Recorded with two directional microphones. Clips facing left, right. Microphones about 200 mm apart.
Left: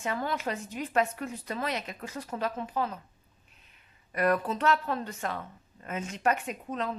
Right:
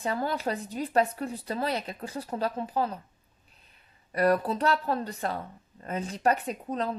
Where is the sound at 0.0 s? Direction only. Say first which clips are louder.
Right 2 dB; 35° right (ahead or behind).